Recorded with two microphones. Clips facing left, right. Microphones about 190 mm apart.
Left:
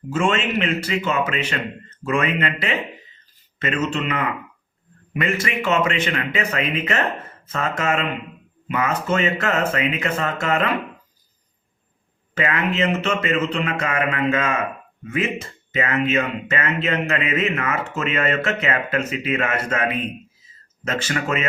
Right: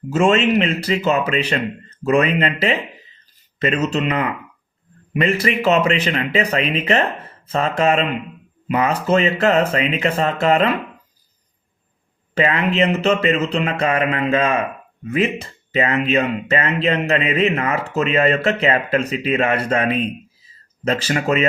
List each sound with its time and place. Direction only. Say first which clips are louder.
0.1 s speech: right 6 dB; 40° right (ahead or behind)
12.3 s speech: right 4 dB; 30° right (ahead or behind)